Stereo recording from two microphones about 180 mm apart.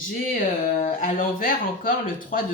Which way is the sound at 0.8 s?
50° left (ahead or behind).